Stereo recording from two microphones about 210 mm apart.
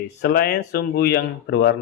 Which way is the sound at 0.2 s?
50° left (ahead or behind).